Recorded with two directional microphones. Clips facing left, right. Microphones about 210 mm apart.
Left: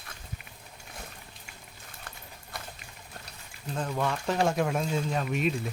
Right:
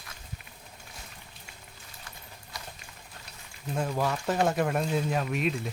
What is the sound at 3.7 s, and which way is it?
Speech, 10° right (ahead or behind).